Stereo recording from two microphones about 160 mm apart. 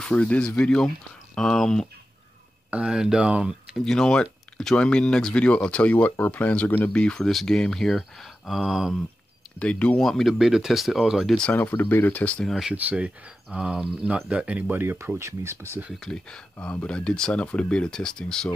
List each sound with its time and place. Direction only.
0.0 s speech: 5° left (ahead or behind)
9.6 s speech: 10° left (ahead or behind); by 15.9 s 15° right (ahead or behind)
15.9 s speech: 5° left (ahead or behind)